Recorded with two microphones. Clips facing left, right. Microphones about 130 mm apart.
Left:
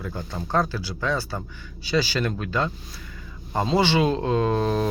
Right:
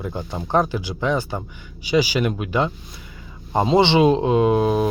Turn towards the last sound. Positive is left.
turn(degrees=-10)  # may be behind; listen again after turning